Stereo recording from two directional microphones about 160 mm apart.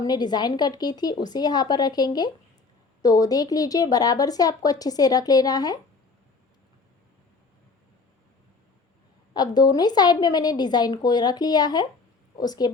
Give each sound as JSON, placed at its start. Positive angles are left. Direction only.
{"t": 0.0, "sound": "speech", "side_deg": 25}
{"t": 9.3, "sound": "speech", "side_deg": 25}